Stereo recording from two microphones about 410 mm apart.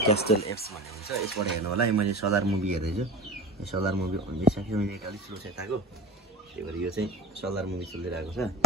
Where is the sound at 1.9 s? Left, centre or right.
Right.